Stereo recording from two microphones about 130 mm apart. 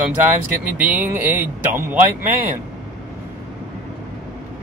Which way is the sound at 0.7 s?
10° right (ahead or behind).